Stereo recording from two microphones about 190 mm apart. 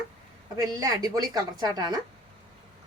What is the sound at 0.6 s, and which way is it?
A woman's voice, 20° right (ahead or behind).